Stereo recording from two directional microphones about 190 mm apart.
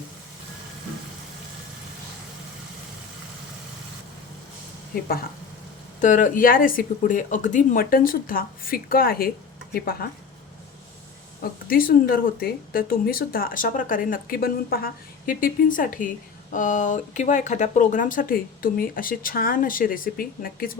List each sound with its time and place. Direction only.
4.9 s speech: 50° left (ahead or behind)
11.7 s speech: 50° left (ahead or behind)